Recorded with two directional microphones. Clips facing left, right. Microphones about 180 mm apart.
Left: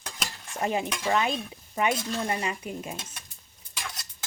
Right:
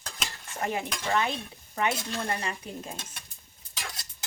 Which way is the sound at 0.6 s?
20° left (ahead or behind).